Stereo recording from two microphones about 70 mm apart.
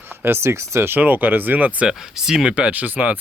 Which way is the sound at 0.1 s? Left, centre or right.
Right.